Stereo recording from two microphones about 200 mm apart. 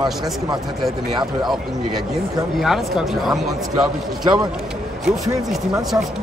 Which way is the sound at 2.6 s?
Centre (ahead or behind).